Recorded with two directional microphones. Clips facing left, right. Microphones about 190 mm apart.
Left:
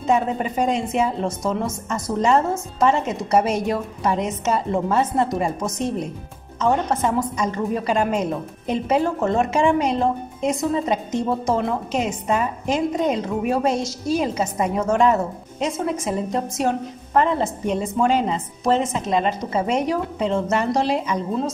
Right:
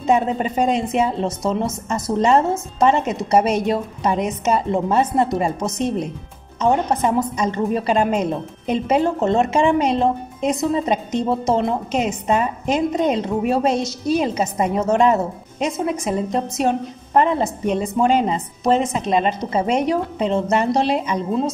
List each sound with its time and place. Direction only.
0.0 s a woman's voice: 20° right (ahead or behind)